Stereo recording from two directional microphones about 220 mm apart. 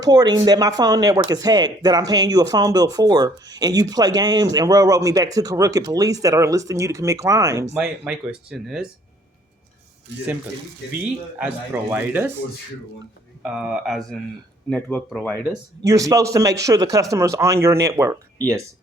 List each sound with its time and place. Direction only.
0.0 s speech: 20° right (ahead or behind)
7.8 s speech: 5° right (ahead or behind)
10.9 s speech: 5° right (ahead or behind)
13.4 s speech: 5° right (ahead or behind)
15.8 s speech: 15° right (ahead or behind)